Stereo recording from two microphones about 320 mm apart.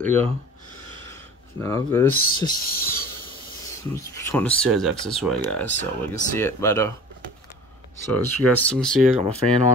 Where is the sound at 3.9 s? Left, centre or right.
Centre.